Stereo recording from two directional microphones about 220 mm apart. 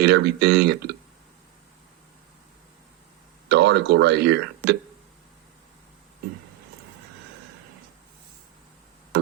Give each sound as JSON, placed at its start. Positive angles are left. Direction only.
{"t": 0.0, "sound": "speech", "side_deg": -50}
{"t": 3.5, "sound": "speech", "side_deg": -50}